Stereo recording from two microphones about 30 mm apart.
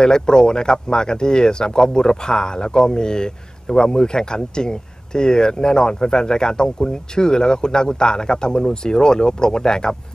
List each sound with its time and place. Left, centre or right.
0.0 s speech: left